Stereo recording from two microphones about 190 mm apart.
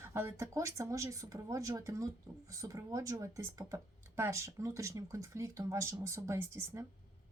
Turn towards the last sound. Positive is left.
turn(degrees=-15)  # may be behind; listen again after turning